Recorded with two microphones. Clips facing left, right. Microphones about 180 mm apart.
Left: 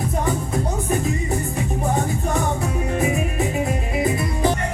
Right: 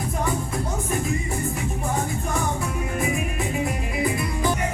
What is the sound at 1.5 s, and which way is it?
Music, 40° left (ahead or behind).